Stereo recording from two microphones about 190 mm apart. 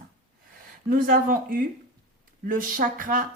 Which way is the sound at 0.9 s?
50° right (ahead or behind).